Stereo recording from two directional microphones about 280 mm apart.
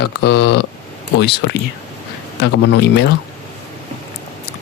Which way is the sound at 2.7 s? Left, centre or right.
Left.